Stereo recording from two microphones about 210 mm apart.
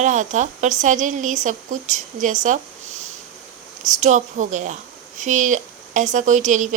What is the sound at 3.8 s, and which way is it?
Speech, 35° right (ahead or behind).